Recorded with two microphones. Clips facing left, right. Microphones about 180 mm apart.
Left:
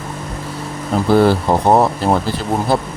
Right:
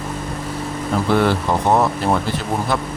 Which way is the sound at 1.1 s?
35° left (ahead or behind).